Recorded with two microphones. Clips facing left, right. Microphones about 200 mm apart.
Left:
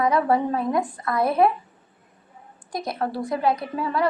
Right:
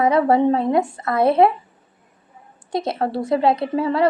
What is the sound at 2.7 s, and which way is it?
A woman's voice, 25° right (ahead or behind).